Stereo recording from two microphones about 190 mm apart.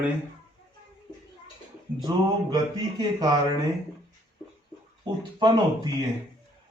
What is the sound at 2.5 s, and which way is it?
Speech, 20° right (ahead or behind).